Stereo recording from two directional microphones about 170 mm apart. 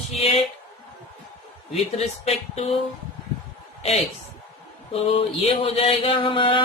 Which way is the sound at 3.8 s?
35° left (ahead or behind).